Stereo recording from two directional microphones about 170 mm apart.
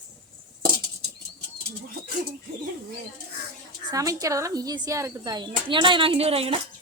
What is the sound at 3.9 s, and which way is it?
Speech, 20° right (ahead or behind).